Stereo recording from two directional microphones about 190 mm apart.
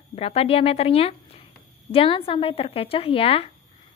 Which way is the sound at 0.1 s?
30° left (ahead or behind).